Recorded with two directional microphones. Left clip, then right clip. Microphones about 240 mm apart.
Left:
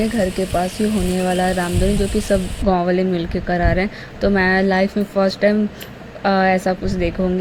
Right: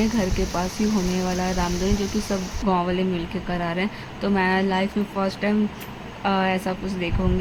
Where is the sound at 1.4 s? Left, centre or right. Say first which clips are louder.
Left 7 dB; centre.